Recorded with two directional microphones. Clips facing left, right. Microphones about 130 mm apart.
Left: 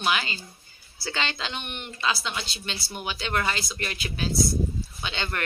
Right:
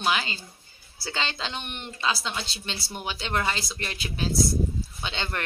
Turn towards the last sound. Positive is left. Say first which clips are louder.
# left 1 dB
turn(degrees=-30)  # may be behind; listen again after turning